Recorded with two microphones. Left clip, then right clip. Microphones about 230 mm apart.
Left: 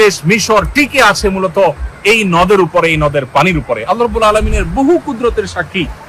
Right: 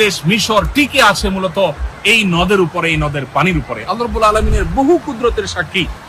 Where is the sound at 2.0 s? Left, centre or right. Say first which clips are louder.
Left 3 dB; left.